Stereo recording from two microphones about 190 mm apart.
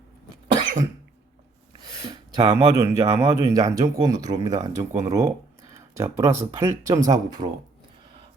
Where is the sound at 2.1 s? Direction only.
20° right (ahead or behind).